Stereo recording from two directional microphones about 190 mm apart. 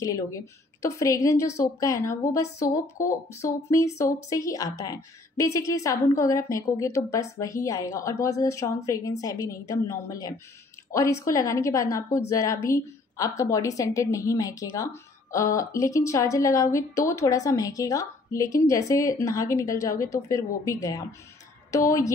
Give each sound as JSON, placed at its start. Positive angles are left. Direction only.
{"t": 0.0, "sound": "a woman's voice", "side_deg": 20}